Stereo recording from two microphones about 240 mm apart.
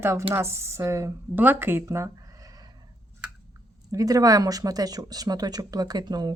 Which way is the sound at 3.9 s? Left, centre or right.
Centre.